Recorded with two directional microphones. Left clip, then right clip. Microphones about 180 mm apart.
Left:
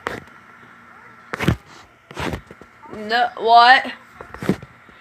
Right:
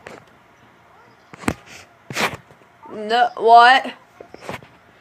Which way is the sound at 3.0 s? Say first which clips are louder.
Right 2 dB; 20° right (ahead or behind).